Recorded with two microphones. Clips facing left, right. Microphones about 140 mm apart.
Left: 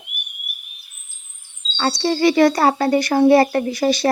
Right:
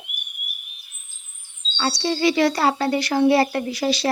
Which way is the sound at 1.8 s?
50° left (ahead or behind).